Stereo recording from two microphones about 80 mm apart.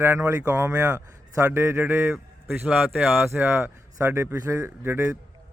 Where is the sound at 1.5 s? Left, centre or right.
Right.